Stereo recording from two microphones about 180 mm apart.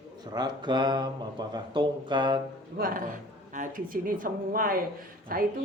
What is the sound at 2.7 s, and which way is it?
A woman's voice, 50° right (ahead or behind).